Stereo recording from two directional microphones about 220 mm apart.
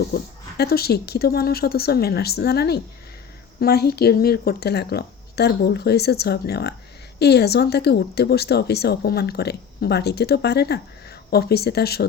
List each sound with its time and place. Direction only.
0.1 s speech: 45° left (ahead or behind)